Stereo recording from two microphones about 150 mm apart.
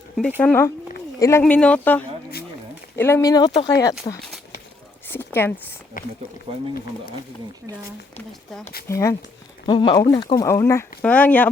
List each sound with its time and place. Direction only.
0.3 s speech: 15° left (ahead or behind)
5.0 s a sound: 15° left (ahead or behind)
6.0 s speech: 65° left (ahead or behind)
8.9 s speech: 20° left (ahead or behind)
9.6 s speech: 30° left (ahead or behind); by 11.4 s 10° left (ahead or behind)